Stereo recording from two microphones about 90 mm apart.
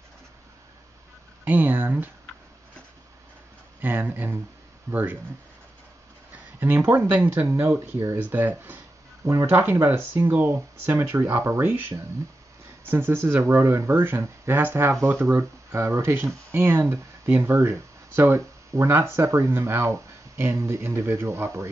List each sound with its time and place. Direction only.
1.4 s speech: 20° right (ahead or behind)
3.8 s speech: 20° right (ahead or behind)
4.9 s speech: 35° right (ahead or behind)
6.3 s speech: 20° right (ahead or behind)
9.3 s speech: 35° right (ahead or behind)